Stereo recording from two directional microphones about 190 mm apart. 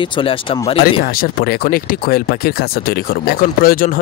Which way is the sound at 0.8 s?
50° left (ahead or behind).